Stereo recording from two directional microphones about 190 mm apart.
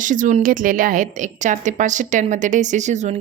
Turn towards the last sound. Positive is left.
turn(degrees=-40)  # may be behind; listen again after turning